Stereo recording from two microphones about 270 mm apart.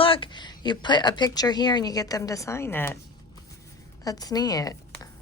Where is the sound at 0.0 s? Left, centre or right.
Centre.